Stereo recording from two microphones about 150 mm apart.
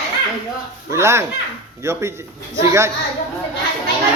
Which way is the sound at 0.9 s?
20° right (ahead or behind).